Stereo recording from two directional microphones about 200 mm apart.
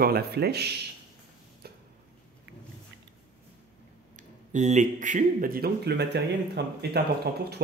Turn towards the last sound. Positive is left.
turn(degrees=-55)  # may be behind; listen again after turning